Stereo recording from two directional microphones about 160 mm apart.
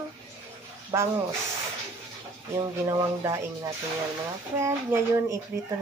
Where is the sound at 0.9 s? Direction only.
20° right (ahead or behind).